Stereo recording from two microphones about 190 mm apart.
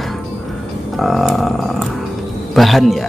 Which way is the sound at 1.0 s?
Centre (ahead or behind).